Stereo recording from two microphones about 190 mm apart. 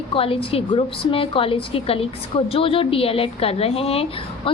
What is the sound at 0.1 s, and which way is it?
A woman's voice, 30° left (ahead or behind).